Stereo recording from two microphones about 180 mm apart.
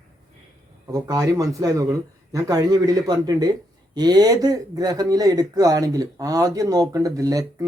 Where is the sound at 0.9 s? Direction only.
20° right (ahead or behind).